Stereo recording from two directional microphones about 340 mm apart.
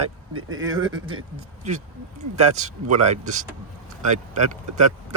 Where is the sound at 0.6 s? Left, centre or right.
Centre.